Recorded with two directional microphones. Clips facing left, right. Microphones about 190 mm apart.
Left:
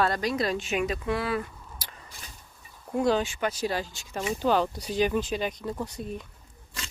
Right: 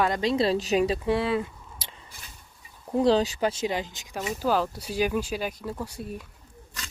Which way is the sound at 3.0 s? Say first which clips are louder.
Right 3 dB; 35° right (ahead or behind).